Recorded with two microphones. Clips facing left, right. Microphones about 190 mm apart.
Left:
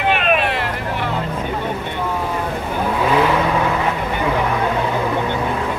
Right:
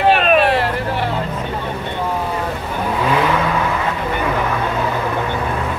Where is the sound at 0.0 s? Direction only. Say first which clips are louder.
Right 4 dB; 35° right (ahead or behind).